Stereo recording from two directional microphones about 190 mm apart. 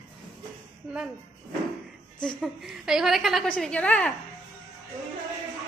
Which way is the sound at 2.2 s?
Centre (ahead or behind).